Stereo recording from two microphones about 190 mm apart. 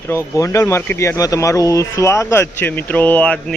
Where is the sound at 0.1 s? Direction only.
15° left (ahead or behind).